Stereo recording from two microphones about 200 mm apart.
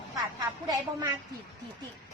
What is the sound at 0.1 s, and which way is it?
A woman's voice, 15° right (ahead or behind).